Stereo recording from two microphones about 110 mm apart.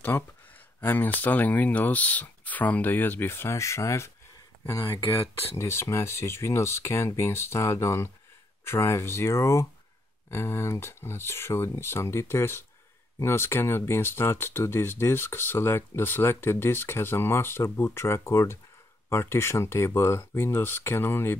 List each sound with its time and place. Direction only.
0.7 s speech: 20° left (ahead or behind)